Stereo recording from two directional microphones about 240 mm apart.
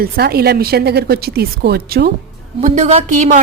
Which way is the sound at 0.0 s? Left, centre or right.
Right.